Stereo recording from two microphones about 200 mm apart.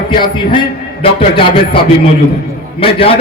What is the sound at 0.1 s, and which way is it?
A man's voice, 25° left (ahead or behind).